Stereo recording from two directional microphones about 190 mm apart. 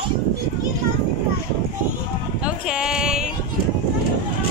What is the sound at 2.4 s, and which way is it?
Speech, 5° right (ahead or behind).